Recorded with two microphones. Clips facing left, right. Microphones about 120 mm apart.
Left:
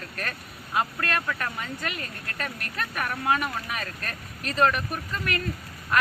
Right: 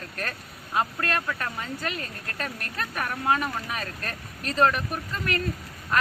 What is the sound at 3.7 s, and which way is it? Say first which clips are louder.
Speech: right 1 dB; 35° right (ahead or behind).